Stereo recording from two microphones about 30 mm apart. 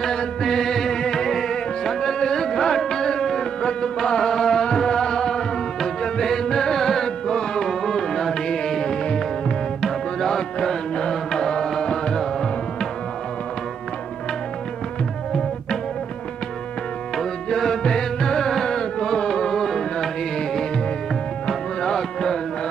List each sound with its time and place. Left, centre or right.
0.4 s music: centre
9.8 s tabla: centre
11.0 s music: left
17.2 s music: centre
19.5 s music: centre
21.5 s music: left